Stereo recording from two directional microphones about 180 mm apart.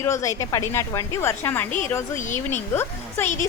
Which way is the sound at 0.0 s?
15° left (ahead or behind).